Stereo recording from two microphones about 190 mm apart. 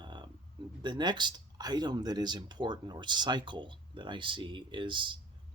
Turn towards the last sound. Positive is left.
turn(degrees=-25)  # may be behind; listen again after turning